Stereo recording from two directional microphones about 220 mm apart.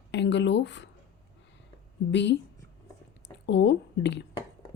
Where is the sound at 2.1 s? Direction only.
55° left (ahead or behind).